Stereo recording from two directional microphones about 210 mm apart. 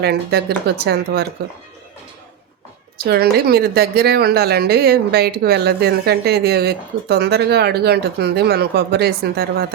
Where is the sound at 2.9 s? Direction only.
50° right (ahead or behind).